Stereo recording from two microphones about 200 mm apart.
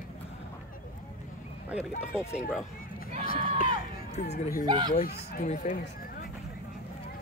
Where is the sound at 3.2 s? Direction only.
45° left (ahead or behind).